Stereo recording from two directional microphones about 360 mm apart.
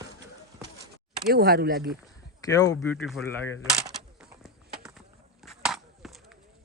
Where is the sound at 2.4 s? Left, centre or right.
Centre.